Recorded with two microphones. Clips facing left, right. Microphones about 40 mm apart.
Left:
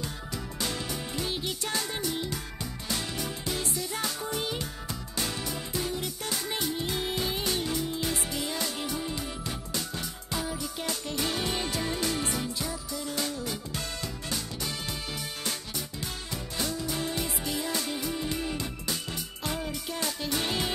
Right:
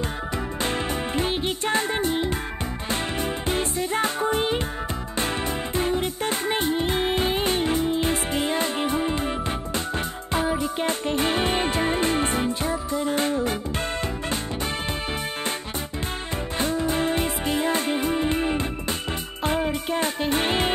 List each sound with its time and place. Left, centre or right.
0.6 s music: right
16.5 s music: right